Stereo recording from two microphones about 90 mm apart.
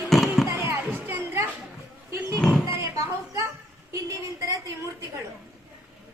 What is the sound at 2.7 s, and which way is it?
Thump, 35° right (ahead or behind).